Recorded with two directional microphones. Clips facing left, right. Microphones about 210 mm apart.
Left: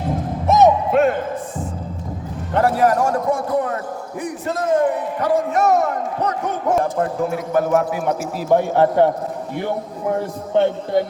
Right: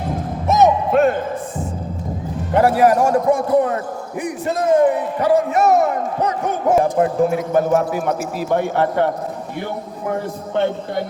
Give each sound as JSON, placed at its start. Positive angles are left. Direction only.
{"t": 0.5, "sound": "music", "side_deg": -40}
{"t": 2.5, "sound": "a man's voice", "side_deg": -10}
{"t": 8.4, "sound": "a man's voice", "side_deg": -65}